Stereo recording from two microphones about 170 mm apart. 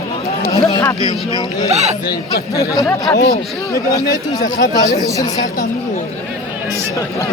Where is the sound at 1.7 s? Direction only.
40° right (ahead or behind).